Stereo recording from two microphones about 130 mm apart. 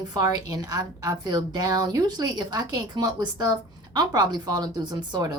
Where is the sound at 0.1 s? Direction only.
30° right (ahead or behind).